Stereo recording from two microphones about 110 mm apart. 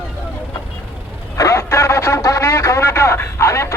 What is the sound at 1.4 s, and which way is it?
Speech, 25° left (ahead or behind).